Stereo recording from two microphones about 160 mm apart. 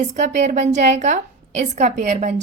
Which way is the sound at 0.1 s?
45° right (ahead or behind).